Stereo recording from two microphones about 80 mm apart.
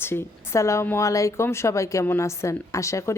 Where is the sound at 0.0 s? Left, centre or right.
Left.